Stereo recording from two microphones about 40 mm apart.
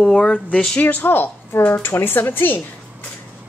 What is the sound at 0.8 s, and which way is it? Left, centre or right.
Speech, left.